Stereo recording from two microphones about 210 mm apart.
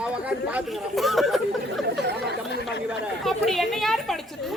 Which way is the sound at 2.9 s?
Centre (ahead or behind).